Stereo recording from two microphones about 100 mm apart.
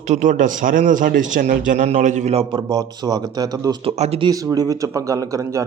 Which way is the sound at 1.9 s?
90° right.